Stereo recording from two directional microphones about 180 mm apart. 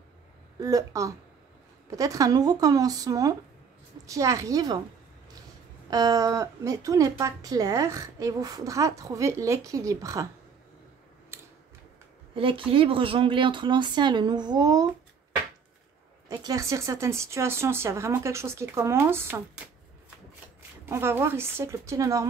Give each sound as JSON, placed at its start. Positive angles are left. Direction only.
{"t": 0.6, "sound": "a woman's voice", "side_deg": -20}
{"t": 5.9, "sound": "a woman's voice", "side_deg": -20}
{"t": 11.3, "sound": "a sound", "side_deg": -15}
{"t": 12.4, "sound": "a woman's voice", "side_deg": -30}
{"t": 16.3, "sound": "a woman's voice", "side_deg": -20}
{"t": 20.8, "sound": "a woman's voice", "side_deg": -15}